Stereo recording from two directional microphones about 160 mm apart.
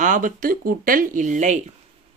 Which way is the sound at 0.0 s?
55° right (ahead or behind).